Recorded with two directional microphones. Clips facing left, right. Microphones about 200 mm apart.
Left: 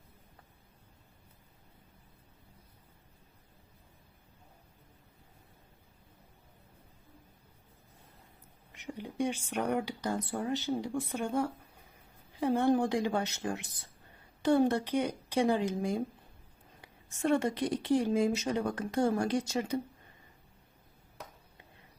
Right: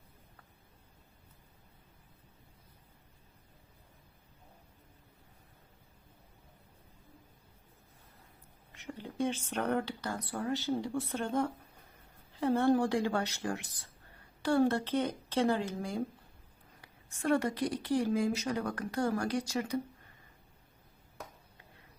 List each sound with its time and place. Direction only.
8.7 s a woman's voice: 15° left (ahead or behind)